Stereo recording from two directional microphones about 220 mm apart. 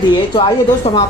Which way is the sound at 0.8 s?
25° left (ahead or behind).